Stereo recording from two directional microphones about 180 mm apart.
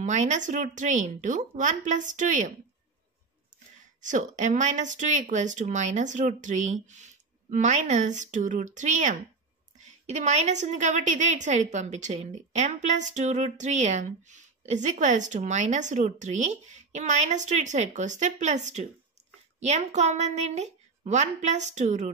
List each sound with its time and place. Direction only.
0.0 s speech: 40° right (ahead or behind)
4.0 s a woman's voice: 45° right (ahead or behind)